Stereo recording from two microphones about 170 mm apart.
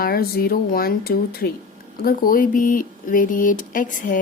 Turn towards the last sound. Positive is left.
turn(degrees=50)  # may be behind; listen again after turning